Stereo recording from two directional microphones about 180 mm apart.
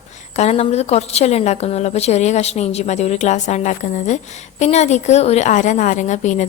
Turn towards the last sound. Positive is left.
turn(degrees=40)  # may be behind; listen again after turning